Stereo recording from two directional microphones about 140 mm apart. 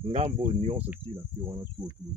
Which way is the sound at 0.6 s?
45° right (ahead or behind).